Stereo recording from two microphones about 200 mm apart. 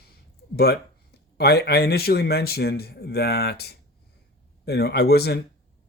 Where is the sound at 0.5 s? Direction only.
50° left (ahead or behind).